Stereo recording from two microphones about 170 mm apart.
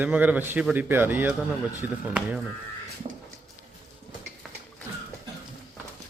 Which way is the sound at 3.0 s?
40° right (ahead or behind).